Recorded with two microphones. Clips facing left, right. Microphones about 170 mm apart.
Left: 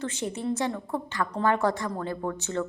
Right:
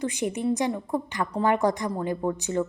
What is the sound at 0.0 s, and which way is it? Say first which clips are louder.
A woman's voice: right 4 dB; 15° right (ahead or behind).